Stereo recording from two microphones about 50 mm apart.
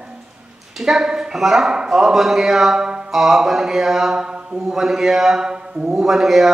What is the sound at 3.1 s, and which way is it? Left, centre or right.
A man's voice, centre.